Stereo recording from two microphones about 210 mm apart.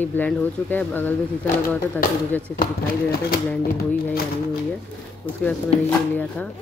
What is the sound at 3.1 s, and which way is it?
Speech, 45° left (ahead or behind).